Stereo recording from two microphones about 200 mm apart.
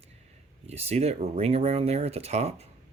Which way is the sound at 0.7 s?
30° right (ahead or behind).